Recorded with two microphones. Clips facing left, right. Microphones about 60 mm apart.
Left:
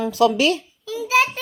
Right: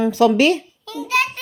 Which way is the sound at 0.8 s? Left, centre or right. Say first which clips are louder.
Left 2 dB; centre.